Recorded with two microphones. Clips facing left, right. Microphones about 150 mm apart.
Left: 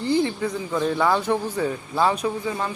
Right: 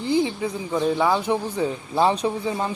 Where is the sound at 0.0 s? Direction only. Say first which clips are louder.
Even; 10° right (ahead or behind).